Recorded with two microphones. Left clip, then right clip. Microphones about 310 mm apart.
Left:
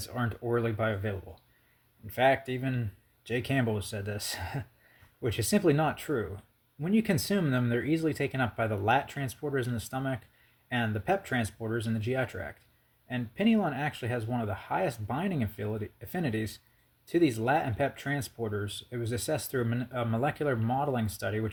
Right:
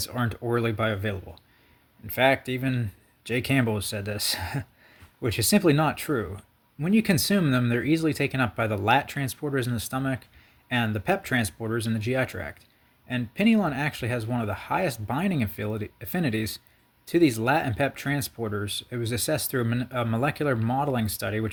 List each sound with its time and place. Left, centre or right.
0.0 s speech: right